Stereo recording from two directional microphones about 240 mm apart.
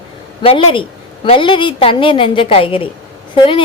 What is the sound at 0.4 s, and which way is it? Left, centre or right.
A woman's voice, left.